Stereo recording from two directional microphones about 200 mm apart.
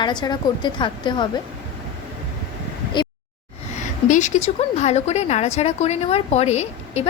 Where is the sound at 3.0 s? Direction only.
25° left (ahead or behind).